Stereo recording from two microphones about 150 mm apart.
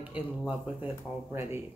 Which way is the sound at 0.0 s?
10° right (ahead or behind).